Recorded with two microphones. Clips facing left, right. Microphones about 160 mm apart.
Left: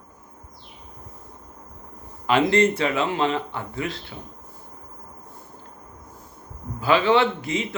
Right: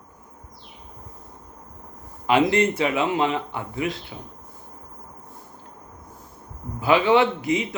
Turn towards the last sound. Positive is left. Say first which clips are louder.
# right 3 dB
turn(degrees=-15)  # may be behind; listen again after turning